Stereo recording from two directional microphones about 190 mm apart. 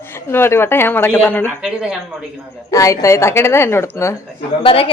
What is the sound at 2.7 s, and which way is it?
Speech, 15° left (ahead or behind).